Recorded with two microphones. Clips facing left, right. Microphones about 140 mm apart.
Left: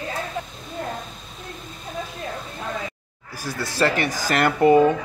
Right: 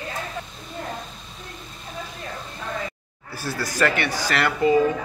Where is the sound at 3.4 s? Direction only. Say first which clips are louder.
Even; 25° left (ahead or behind); by 4.8 s 50° left (ahead or behind).